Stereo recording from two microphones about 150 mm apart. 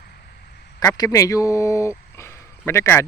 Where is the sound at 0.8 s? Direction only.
20° left (ahead or behind).